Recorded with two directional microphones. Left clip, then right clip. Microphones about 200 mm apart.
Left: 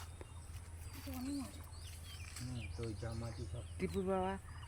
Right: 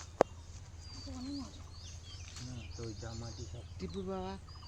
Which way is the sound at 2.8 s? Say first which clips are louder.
Right 1 dB; 30° left (ahead or behind).